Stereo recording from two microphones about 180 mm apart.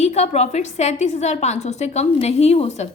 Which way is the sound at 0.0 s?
40° left (ahead or behind).